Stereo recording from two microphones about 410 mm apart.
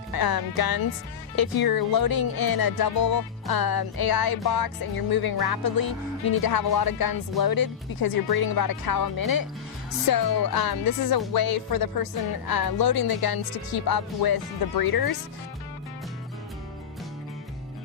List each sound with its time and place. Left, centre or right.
0.1 s music: left